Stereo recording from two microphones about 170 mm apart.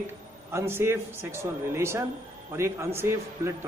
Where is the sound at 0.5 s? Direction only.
15° right (ahead or behind).